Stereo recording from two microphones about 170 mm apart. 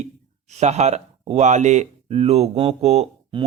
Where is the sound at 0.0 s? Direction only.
40° right (ahead or behind).